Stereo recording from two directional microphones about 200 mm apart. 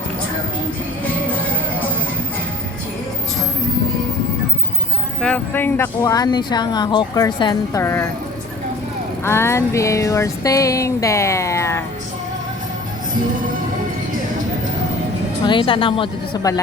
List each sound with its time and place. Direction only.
5.2 s speech: 5° left (ahead or behind)
9.2 s speech: 10° left (ahead or behind)
15.4 s a woman's voice: 25° left (ahead or behind)